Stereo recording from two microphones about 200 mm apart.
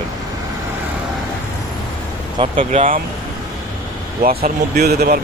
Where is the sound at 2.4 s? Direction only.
25° right (ahead or behind).